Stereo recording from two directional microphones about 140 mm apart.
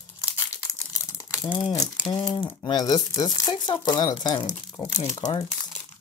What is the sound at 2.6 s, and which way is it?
Speech, 30° left (ahead or behind).